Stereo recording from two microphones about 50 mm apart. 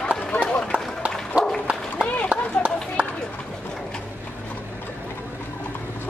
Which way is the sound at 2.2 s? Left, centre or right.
Right.